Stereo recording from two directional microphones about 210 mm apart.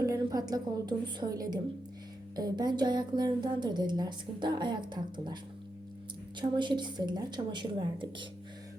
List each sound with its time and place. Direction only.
0.0 s a woman's voice: 15° right (ahead or behind)
6.4 s speech: 20° right (ahead or behind)